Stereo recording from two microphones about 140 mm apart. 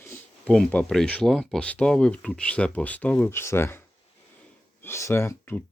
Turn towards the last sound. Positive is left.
turn(degrees=15)  # may be behind; listen again after turning